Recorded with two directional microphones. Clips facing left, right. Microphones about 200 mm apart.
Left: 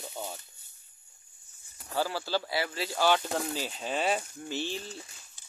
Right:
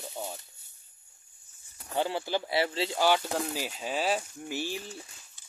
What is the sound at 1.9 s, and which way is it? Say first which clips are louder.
Speech: right 1 dB; 20° right (ahead or behind).